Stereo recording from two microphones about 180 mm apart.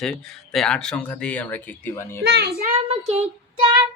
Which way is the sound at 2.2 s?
65° right (ahead or behind).